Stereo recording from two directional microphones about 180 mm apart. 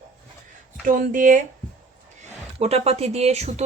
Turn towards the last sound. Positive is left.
turn(degrees=-35)  # may be behind; listen again after turning